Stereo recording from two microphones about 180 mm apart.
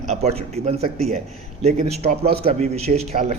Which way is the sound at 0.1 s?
35° right (ahead or behind).